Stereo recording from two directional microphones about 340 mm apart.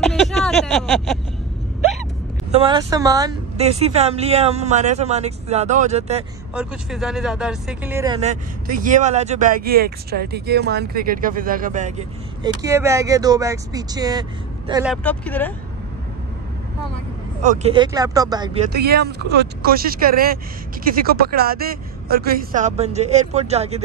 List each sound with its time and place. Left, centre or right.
0.0 s a sound: centre
2.5 s speech: centre
6.5 s speech: centre
15.0 s speech: centre
17.4 s speech: centre
18.7 s speech: right